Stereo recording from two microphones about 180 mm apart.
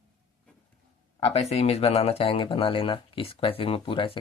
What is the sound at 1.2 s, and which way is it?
Speech, 35° left (ahead or behind).